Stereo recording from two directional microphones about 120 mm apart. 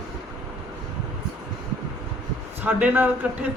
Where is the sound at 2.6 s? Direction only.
15° right (ahead or behind).